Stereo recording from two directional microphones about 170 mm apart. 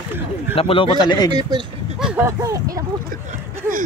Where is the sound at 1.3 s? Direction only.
25° right (ahead or behind).